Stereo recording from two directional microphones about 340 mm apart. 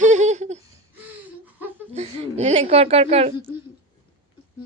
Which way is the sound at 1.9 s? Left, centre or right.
Centre.